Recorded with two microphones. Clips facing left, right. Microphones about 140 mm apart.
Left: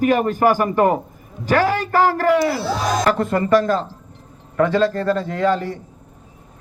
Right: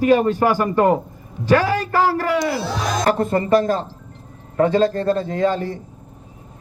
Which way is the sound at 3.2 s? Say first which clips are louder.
Even; 25° right (ahead or behind).